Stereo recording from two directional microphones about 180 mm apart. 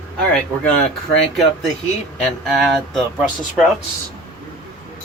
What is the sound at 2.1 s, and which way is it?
Speech, centre (ahead or behind).